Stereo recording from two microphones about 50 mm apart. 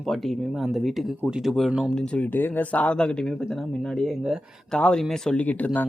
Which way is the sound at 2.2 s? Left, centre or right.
Left.